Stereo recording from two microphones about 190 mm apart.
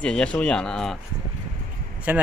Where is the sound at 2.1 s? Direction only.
10° right (ahead or behind).